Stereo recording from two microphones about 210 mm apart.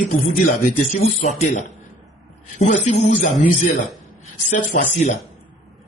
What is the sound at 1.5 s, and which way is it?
A man's voice, 35° left (ahead or behind).